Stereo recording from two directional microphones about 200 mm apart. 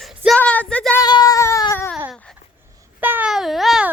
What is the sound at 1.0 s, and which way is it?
Baby cry, 20° left (ahead or behind).